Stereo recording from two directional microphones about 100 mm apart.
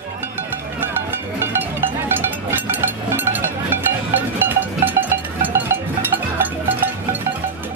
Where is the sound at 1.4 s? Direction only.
20° right (ahead or behind).